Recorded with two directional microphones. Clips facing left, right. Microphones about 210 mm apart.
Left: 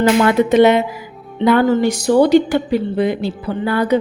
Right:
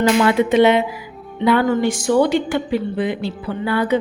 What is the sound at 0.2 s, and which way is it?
A woman's voice, 40° left (ahead or behind).